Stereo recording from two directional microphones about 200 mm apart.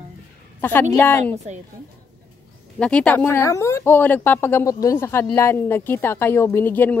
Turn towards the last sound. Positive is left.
turn(degrees=10)  # may be behind; listen again after turning